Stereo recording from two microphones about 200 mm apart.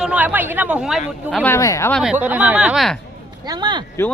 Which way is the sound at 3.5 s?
20° right (ahead or behind).